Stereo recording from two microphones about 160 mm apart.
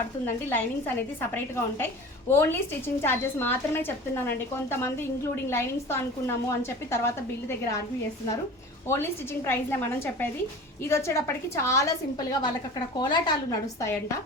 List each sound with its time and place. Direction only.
0.3 s a woman's voice: 15° left (ahead or behind)
10.8 s a woman's voice: 15° left (ahead or behind)